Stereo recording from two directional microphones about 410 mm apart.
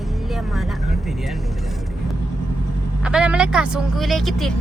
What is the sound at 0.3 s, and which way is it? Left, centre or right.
Vehicle, centre.